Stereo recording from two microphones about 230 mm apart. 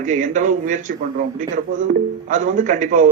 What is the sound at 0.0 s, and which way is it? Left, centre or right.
Speech, right.